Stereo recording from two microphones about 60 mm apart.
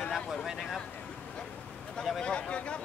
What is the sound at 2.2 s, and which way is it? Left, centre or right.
Speech, centre.